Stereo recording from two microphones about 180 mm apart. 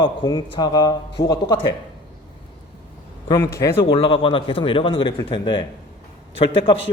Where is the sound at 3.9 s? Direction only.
30° left (ahead or behind).